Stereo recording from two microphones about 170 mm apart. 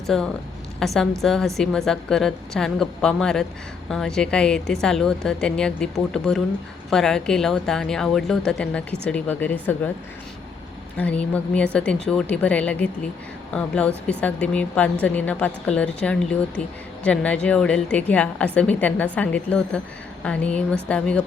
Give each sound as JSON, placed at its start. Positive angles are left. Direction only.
{"t": 0.1, "sound": "a woman's voice", "side_deg": 0}
{"t": 10.9, "sound": "a woman's voice", "side_deg": 10}